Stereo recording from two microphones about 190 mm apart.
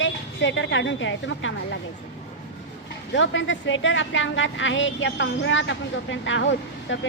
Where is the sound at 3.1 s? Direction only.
80° left.